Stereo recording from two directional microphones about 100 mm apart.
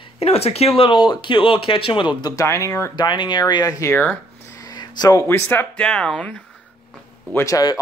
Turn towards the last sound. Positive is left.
turn(degrees=40)  # may be behind; listen again after turning